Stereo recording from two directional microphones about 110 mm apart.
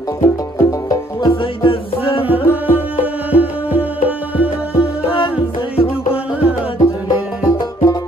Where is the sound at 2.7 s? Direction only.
15° right (ahead or behind).